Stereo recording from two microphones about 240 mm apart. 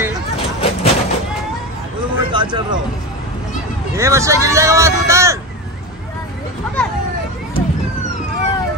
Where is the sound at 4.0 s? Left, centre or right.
Centre.